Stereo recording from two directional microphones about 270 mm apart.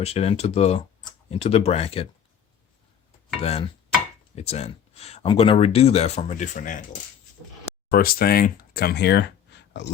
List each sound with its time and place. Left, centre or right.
0.0 s speech: left
3.4 s speech: left
7.9 s speech: left